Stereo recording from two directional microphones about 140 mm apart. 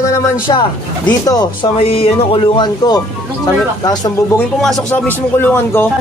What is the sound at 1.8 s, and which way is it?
Music, 45° left (ahead or behind).